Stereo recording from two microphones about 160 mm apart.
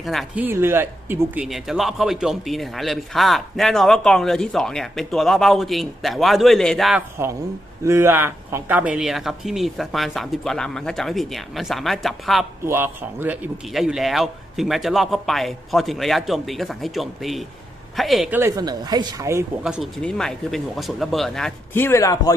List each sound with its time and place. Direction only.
0.0 s a man's voice: centre (ahead or behind)
0.3 s speech: 15° right (ahead or behind)
1.5 s a man's voice: centre (ahead or behind)
7.9 s a man's voice: 15° right (ahead or behind); by 12.5 s centre (ahead or behind)
12.6 s a man's voice: 15° right (ahead or behind)
18.3 s speech: 15° right (ahead or behind)
19.6 s a man's voice: centre (ahead or behind)
21.8 s speech: 15° left (ahead or behind)